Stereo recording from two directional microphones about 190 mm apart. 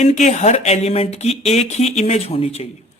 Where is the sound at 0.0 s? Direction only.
40° left (ahead or behind).